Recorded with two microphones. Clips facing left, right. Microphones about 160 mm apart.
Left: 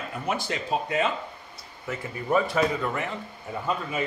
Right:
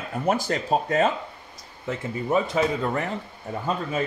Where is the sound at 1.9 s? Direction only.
20° right (ahead or behind).